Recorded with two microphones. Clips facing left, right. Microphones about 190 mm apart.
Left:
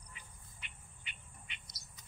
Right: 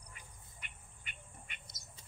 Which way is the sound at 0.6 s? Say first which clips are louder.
Right 1 dB; 50° right (ahead or behind).